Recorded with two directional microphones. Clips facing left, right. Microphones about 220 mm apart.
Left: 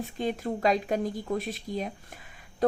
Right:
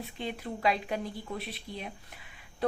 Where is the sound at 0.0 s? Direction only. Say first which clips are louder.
Left 7 dB; 45° left (ahead or behind).